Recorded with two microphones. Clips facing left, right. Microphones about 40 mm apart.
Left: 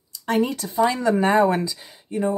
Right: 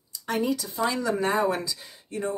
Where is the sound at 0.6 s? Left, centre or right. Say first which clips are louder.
Left 6 dB; left.